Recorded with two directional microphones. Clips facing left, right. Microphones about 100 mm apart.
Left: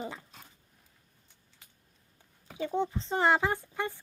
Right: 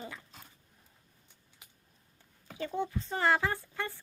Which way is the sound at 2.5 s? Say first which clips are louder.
Left 3 dB; 20° left (ahead or behind).